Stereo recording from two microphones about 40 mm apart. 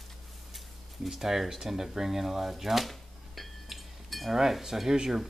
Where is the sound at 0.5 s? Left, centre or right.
Centre.